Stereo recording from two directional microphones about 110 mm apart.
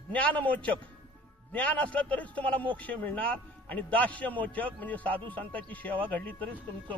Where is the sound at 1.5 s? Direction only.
15° left (ahead or behind).